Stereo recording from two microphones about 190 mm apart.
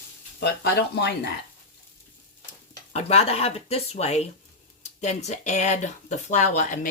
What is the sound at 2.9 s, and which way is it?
Speech, 35° left (ahead or behind).